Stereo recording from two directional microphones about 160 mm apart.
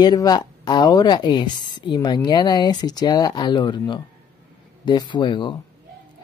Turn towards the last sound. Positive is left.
turn(degrees=30)  # may be behind; listen again after turning